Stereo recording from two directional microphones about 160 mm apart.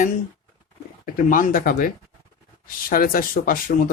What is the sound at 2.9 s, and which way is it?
Speech, 65° left (ahead or behind).